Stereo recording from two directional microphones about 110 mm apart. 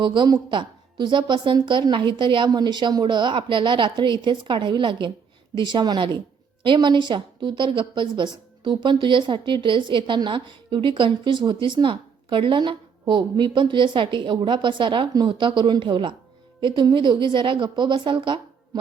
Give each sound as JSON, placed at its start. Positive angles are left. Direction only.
{"t": 0.0, "sound": "a woman's voice", "side_deg": -45}